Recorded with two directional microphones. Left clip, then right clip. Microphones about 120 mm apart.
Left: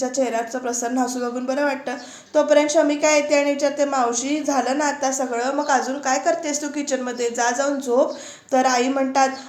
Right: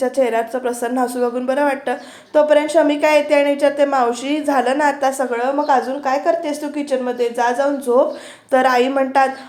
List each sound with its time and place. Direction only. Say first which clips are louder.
0.0 s a woman's voice: right 5 dB; 30° right (ahead or behind)